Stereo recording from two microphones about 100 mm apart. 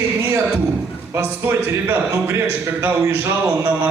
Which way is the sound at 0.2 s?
20° right (ahead or behind).